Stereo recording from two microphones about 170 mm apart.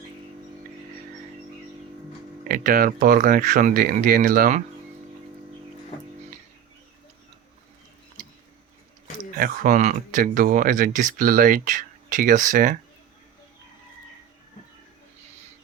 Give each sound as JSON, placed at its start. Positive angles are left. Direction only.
{"t": 2.5, "sound": "speech", "side_deg": -55}
{"t": 9.3, "sound": "speech", "side_deg": -50}